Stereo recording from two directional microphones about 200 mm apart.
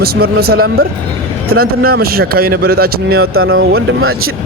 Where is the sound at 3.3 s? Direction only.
90° right.